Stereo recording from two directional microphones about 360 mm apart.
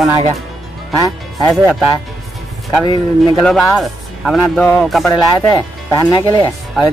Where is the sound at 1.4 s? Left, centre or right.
Centre.